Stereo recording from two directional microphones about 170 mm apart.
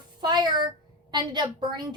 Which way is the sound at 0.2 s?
25° right (ahead or behind).